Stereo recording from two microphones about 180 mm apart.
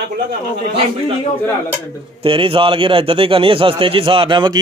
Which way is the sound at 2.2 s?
30° right (ahead or behind).